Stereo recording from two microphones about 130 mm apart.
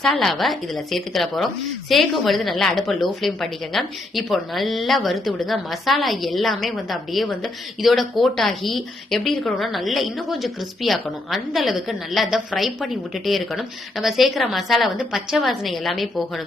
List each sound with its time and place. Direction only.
0.0 s a woman's voice: 5° left (ahead or behind)